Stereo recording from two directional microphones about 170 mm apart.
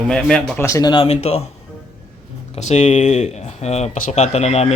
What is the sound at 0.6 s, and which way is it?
Speech, 20° left (ahead or behind).